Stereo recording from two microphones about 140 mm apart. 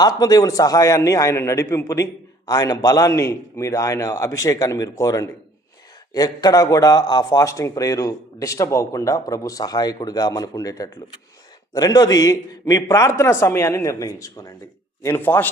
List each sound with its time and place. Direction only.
0.0 s a man's voice: 25° left (ahead or behind)